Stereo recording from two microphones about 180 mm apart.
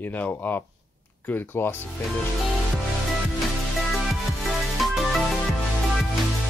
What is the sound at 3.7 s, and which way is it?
Music, centre (ahead or behind).